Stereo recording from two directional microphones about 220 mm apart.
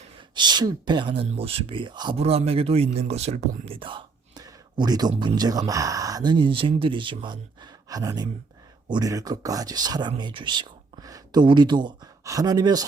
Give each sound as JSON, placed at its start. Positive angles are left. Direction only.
{"t": 0.2, "sound": "speech", "side_deg": -20}